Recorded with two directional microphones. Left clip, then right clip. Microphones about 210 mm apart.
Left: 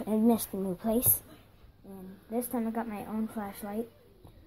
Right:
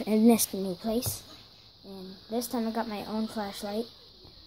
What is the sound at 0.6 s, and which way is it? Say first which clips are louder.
Speech: even; 5° right (ahead or behind).